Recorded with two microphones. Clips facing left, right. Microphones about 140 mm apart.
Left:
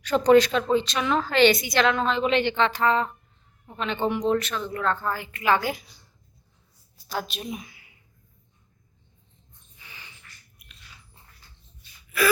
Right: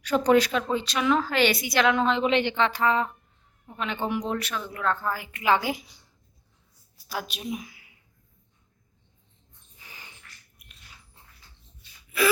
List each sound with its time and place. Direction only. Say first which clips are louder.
0.0 s a woman's voice: left 3 dB; 10° right (ahead or behind)
7.1 s a woman's voice: left 1 dB; 5° right (ahead or behind)
9.8 s a sound: even; 45° right (ahead or behind)